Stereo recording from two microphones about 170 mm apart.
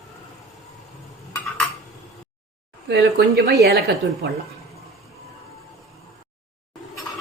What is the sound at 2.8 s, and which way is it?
A woman's voice, 80° right.